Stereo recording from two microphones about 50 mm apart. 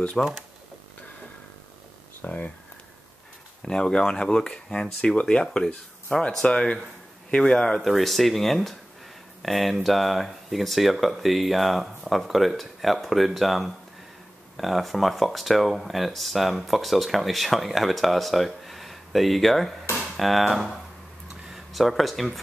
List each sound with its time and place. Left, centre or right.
0.2 s speech: centre
2.2 s speech: left
3.6 s speech: centre
7.8 s speech: centre
21.7 s speech: centre